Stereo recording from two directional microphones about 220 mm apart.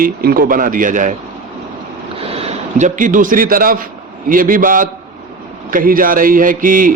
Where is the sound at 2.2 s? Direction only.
25° right (ahead or behind).